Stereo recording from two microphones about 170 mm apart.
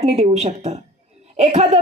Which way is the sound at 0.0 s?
40° right (ahead or behind).